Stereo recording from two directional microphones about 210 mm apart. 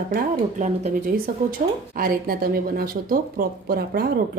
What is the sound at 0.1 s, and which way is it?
Speech, 40° right (ahead or behind).